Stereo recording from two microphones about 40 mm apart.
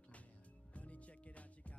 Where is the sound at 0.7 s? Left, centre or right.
Left.